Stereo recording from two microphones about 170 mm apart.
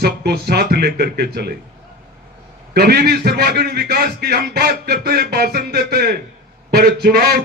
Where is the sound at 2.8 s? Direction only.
70° right (ahead or behind).